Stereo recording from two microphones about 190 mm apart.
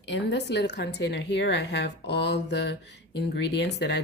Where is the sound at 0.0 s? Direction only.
65° left (ahead or behind).